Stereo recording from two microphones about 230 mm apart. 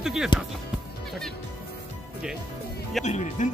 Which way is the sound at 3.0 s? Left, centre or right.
Left.